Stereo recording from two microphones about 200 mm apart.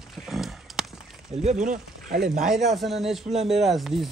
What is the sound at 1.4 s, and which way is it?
Speech, 40° right (ahead or behind).